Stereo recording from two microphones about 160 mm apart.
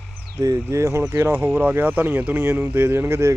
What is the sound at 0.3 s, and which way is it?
Speech, 20° right (ahead or behind).